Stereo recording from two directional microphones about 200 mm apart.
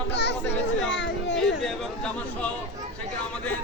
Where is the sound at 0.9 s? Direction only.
65° left (ahead or behind).